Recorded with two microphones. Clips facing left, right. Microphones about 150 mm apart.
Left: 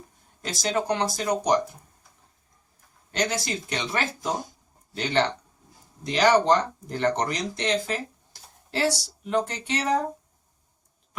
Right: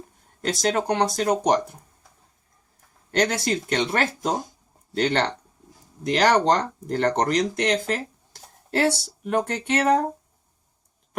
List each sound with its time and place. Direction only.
0.4 s speech: 60° right (ahead or behind)
3.1 s speech: 60° right (ahead or behind)